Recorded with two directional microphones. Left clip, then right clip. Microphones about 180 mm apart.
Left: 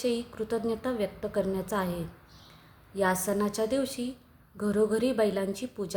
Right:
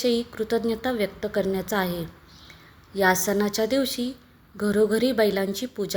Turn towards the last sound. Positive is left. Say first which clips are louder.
# right 5 dB
turn(degrees=-10)  # may be behind; listen again after turning